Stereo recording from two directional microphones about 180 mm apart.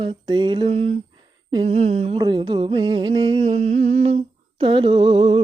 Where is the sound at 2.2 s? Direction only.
25° right (ahead or behind); by 4.2 s 40° right (ahead or behind).